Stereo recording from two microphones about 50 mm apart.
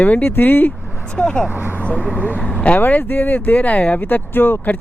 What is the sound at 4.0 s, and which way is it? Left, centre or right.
Speech, left.